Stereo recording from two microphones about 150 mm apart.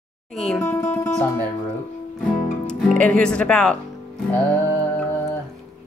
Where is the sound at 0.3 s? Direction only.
Centre (ahead or behind).